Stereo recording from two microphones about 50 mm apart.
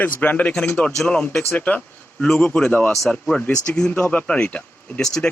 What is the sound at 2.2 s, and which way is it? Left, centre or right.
A man's voice, centre.